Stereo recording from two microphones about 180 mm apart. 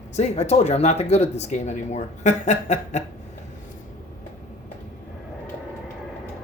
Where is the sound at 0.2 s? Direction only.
40° left (ahead or behind).